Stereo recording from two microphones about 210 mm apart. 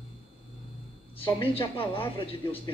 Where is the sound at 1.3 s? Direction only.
25° left (ahead or behind).